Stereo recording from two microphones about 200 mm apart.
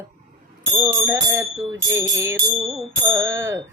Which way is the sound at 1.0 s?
15° right (ahead or behind).